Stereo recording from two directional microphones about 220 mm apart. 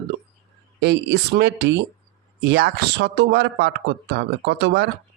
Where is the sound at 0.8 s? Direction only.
50° right (ahead or behind).